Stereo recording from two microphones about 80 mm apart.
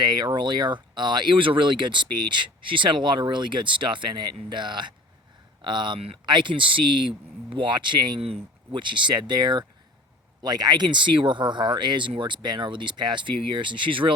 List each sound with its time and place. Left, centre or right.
0.0 s speech: right
8.7 s speech: right